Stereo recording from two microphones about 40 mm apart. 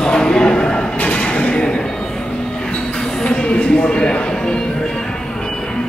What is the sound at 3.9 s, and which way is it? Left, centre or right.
Speech, left.